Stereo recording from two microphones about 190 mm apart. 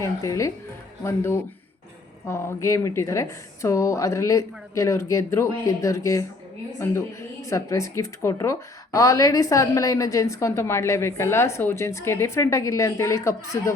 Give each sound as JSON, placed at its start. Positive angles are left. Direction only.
{"t": 0.0, "sound": "speech", "side_deg": 15}